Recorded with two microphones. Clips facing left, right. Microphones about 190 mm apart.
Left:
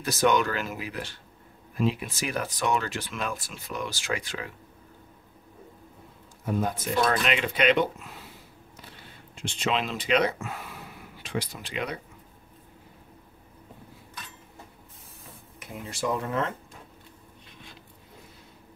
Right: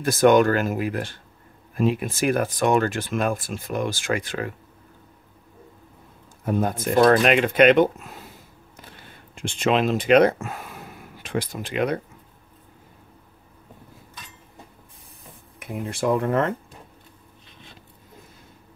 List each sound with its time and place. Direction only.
0.0 s speech: 50° right (ahead or behind)
6.4 s speech: 50° right (ahead or behind)
9.3 s speech: 50° right (ahead or behind)
15.6 s speech: 55° right (ahead or behind)